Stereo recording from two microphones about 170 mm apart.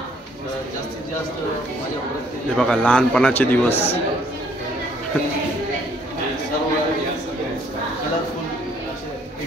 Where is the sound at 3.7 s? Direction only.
35° left (ahead or behind).